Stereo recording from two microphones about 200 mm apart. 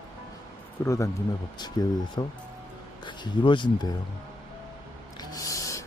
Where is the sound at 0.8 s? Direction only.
15° left (ahead or behind).